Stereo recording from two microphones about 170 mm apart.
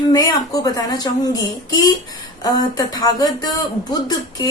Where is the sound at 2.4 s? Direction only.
20° left (ahead or behind).